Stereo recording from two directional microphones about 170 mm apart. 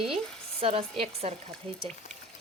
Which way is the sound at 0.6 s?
35° right (ahead or behind).